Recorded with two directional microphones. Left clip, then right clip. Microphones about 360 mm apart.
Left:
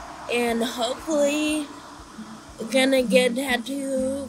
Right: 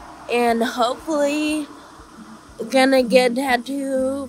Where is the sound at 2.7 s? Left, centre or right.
Right.